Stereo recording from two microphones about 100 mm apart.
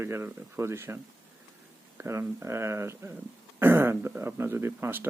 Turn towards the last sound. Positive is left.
turn(degrees=-20)  # may be behind; listen again after turning